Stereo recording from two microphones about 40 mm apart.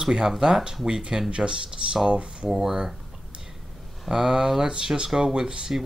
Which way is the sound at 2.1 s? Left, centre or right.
Right.